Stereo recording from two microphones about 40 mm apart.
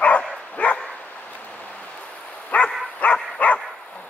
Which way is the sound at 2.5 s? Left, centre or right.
Left.